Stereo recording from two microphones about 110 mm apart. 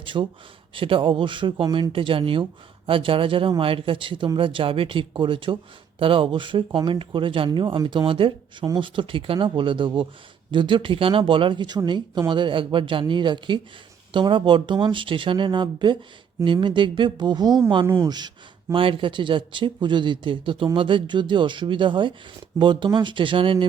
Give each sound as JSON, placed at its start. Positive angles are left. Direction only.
{"t": 0.0, "sound": "speech", "side_deg": -50}
{"t": 17.8, "sound": "speech", "side_deg": -25}
{"t": 18.7, "sound": "speech", "side_deg": -50}